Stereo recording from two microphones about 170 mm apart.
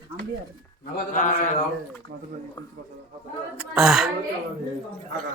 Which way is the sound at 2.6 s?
25° left (ahead or behind).